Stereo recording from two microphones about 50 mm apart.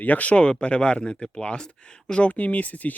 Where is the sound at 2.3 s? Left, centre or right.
Left.